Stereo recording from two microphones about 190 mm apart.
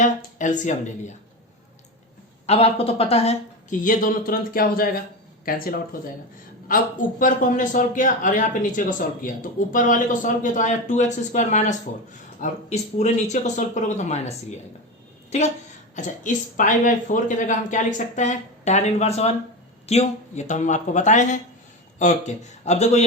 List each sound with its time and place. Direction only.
0.0 s speech: 40° left (ahead or behind)
2.5 s a woman's voice: 30° left (ahead or behind); by 6.0 s 50° left (ahead or behind)
7.2 s a woman's voice: 40° left (ahead or behind)